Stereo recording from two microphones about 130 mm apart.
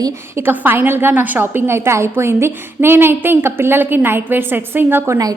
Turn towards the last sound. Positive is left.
turn(degrees=-15)  # may be behind; listen again after turning